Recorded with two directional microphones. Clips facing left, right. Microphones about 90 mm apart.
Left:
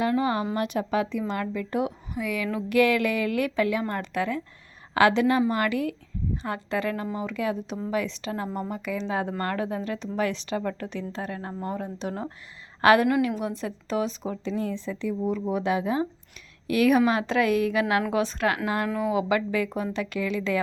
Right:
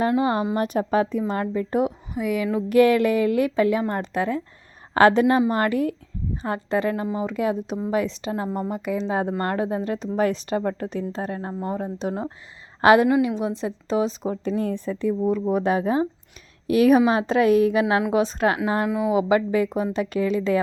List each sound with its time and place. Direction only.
0.1 s a woman's voice: 30° right (ahead or behind)
4.9 s a woman's voice: 40° right (ahead or behind)
14.4 s a woman's voice: 50° right (ahead or behind); by 18.9 s 25° right (ahead or behind)
18.9 s speech: 10° right (ahead or behind)
19.1 s speech: 25° right (ahead or behind)